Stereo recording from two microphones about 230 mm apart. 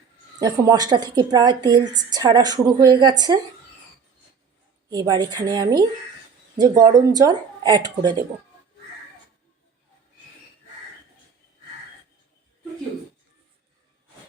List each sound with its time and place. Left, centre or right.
0.3 s a woman's voice: centre
4.9 s a woman's voice: centre